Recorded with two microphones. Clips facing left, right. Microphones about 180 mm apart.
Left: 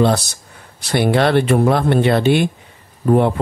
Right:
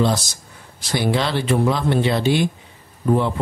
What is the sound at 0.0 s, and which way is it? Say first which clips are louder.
Speech: left 4 dB; 60° left (ahead or behind).